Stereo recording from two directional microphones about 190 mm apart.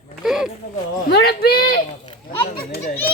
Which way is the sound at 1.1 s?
55° left (ahead or behind).